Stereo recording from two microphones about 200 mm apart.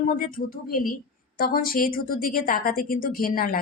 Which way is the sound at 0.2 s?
45° left (ahead or behind).